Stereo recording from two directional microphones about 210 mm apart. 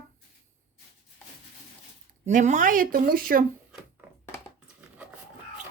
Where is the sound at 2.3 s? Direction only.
35° right (ahead or behind).